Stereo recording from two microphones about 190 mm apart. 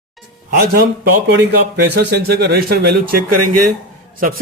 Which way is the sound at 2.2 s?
55° right (ahead or behind).